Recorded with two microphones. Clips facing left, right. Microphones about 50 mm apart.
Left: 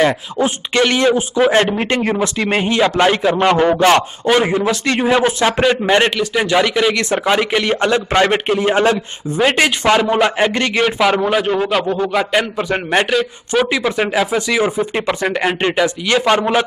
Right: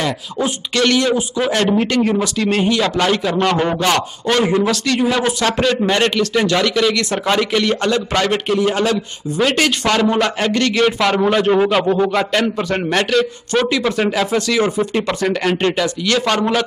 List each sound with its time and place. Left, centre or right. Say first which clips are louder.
0.0 s a man's voice: left 5 dB; left
11.0 s a man's voice: left 1 dB; centre
12.3 s a man's voice: left 1 dB; centre